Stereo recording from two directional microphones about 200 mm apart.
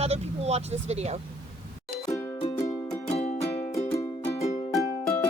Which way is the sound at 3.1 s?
30° left (ahead or behind).